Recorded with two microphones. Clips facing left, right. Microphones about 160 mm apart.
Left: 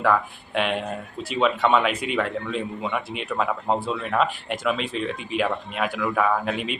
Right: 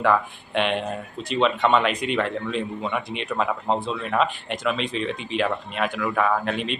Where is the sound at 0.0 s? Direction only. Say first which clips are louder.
Right 1 dB; 5° left (ahead or behind).